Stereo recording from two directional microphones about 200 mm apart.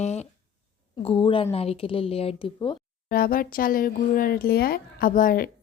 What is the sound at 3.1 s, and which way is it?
Speech, 45° left (ahead or behind).